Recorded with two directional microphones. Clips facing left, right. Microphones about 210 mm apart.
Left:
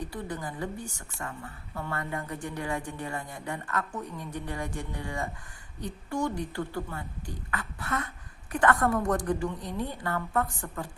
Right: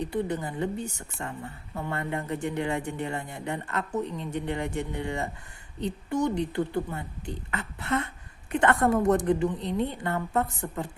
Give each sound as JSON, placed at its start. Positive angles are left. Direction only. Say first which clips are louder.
{"t": 0.0, "sound": "a woman's voice", "louder": "right 6 dB", "side_deg": -25}